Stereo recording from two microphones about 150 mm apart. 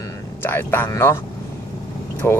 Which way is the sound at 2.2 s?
15° left (ahead or behind).